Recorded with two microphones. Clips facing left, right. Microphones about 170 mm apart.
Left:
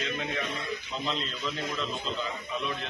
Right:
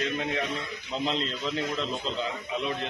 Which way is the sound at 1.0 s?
30° right (ahead or behind).